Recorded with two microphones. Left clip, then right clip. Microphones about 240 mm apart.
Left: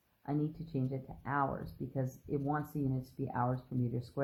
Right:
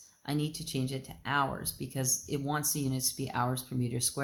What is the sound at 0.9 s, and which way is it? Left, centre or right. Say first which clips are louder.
Speech: right 5 dB; right.